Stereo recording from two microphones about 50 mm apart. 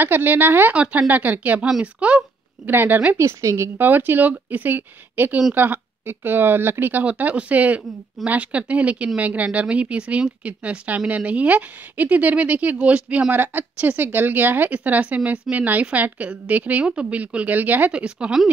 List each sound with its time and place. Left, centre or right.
0.0 s speech: right
0.7 s speech: right
1.7 s speech: right
2.6 s speech: right
3.2 s a woman's voice: right
3.7 s speech: right
7.1 s speech: right
13.3 s speech: right
14.7 s speech: right
17.9 s speech: centre